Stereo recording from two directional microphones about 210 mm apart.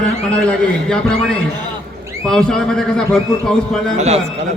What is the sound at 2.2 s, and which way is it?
A man's voice, 5° left (ahead or behind).